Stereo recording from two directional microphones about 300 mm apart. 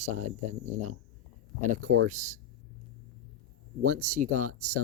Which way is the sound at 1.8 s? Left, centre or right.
Right.